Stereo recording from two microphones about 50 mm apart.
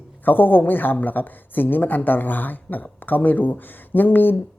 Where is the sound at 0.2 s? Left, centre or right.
Left.